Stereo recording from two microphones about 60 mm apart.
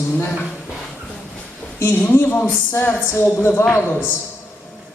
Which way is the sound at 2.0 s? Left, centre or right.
Left.